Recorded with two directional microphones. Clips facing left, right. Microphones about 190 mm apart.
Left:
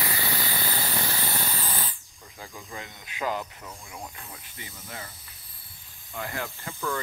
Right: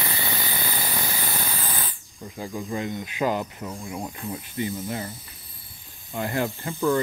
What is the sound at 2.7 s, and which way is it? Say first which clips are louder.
Speech: right 10 dB; 15° right (ahead or behind).